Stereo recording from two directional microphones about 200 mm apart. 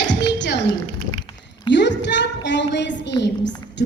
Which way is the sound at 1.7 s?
60° left (ahead or behind).